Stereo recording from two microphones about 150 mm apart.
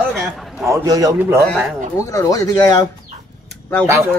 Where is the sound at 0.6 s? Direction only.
20° right (ahead or behind).